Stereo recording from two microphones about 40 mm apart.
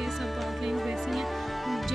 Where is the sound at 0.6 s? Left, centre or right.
Centre.